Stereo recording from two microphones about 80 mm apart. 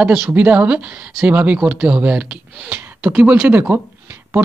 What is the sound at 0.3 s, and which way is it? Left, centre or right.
Speech, centre.